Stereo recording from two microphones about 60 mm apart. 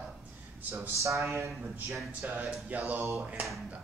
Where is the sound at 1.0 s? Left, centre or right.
Right.